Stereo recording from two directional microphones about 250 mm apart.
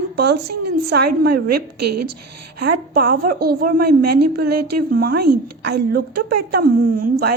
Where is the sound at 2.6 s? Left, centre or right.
Right.